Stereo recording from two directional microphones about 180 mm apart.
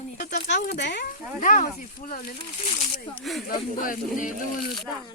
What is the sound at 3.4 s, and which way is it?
Speech, 50° left (ahead or behind).